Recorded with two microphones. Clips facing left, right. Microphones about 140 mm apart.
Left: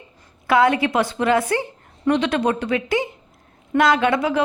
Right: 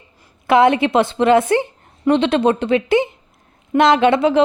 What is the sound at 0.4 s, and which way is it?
A woman's voice, 20° right (ahead or behind).